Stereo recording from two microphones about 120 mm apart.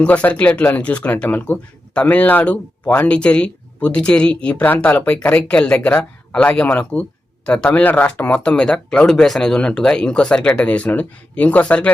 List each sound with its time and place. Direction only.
0.0 s speech: 10° left (ahead or behind)